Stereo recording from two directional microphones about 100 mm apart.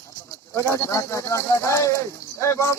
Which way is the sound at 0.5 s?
25° left (ahead or behind).